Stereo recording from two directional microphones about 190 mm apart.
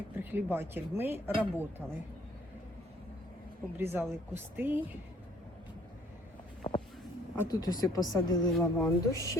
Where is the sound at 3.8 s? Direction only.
10° right (ahead or behind).